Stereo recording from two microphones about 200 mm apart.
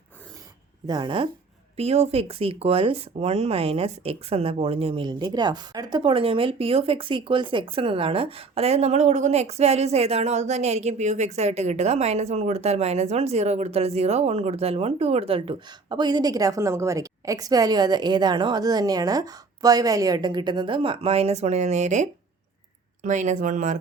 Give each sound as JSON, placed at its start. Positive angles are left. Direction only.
{"t": 0.9, "sound": "speech", "side_deg": -20}